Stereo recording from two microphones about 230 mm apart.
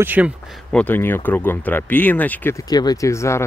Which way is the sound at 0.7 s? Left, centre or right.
Centre.